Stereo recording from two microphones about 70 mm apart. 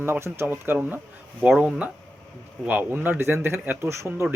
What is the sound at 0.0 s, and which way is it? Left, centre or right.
Speech, right.